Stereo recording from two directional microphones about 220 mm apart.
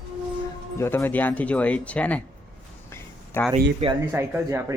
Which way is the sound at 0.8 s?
10° left (ahead or behind).